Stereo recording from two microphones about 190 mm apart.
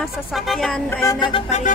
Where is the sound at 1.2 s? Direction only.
30° left (ahead or behind).